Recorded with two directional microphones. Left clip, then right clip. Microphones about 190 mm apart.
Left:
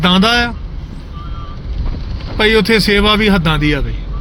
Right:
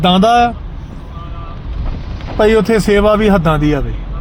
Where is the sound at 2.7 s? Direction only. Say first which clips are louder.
Right 1 dB; 5° left (ahead or behind).